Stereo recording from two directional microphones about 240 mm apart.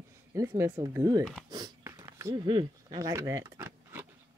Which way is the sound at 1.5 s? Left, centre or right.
Centre.